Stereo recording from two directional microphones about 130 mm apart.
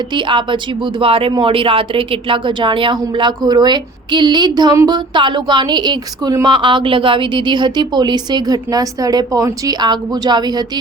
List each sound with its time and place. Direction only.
0.1 s a woman's voice: 40° right (ahead or behind)